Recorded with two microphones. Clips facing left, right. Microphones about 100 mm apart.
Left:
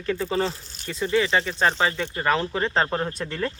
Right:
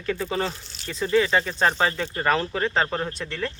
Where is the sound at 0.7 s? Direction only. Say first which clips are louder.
Even; 45° left (ahead or behind).